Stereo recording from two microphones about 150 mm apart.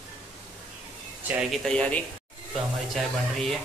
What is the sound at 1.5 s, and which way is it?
Speech, 5° left (ahead or behind).